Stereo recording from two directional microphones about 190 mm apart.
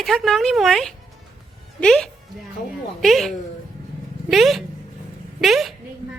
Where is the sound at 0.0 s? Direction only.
Centre (ahead or behind).